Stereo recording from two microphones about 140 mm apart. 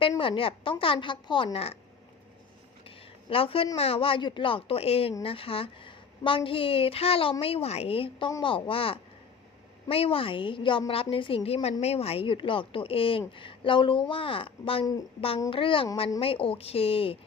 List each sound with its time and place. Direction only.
0.2 s a woman's voice: 40° left (ahead or behind)
3.2 s a woman's voice: 40° left (ahead or behind)